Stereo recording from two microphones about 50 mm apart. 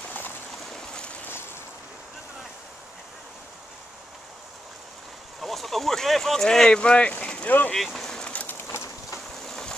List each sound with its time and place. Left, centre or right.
5.4 s speech: centre
6.7 s speech: left
7.4 s speech: left
7.7 s vehicle: centre
8.5 s bird: left
9.5 s boat: centre